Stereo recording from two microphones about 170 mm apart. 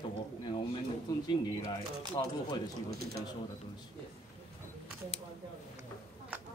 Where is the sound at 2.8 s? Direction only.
65° right (ahead or behind).